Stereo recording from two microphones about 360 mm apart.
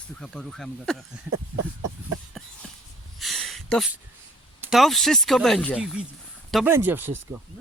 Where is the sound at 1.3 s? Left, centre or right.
Right.